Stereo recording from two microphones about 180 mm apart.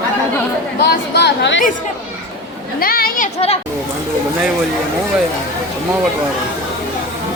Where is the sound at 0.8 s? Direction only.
65° left (ahead or behind).